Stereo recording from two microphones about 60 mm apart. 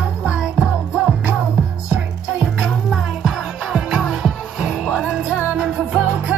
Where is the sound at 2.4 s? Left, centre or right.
Centre.